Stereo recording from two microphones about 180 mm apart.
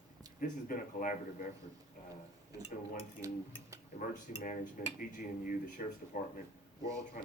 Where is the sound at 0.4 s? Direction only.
50° left (ahead or behind).